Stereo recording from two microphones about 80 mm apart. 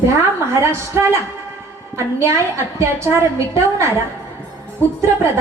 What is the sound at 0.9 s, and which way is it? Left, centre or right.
A woman's voice, right.